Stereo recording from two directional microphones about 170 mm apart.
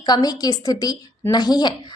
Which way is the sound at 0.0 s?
25° left (ahead or behind).